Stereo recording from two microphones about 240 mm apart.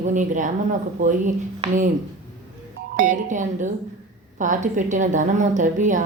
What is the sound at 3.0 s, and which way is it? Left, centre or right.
A woman's voice, right.